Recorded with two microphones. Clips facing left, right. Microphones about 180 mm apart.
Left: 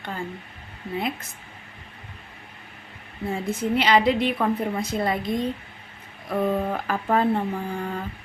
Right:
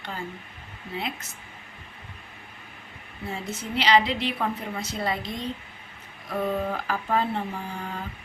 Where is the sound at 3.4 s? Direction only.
55° left (ahead or behind).